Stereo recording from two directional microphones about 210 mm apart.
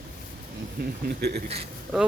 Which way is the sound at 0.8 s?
50° right (ahead or behind).